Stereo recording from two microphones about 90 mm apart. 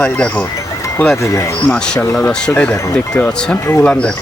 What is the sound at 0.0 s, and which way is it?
Speech, 15° left (ahead or behind).